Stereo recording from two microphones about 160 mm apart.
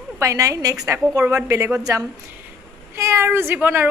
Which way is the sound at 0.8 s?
20° right (ahead or behind).